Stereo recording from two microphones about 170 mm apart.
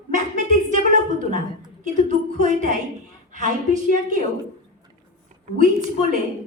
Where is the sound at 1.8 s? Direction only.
50° right (ahead or behind).